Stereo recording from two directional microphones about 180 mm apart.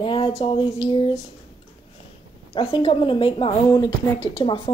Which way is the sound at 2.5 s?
30° left (ahead or behind).